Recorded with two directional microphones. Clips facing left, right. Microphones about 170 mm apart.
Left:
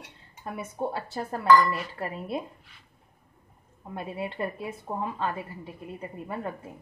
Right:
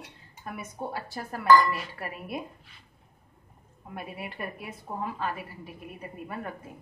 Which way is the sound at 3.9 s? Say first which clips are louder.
Left 5 dB; 25° left (ahead or behind).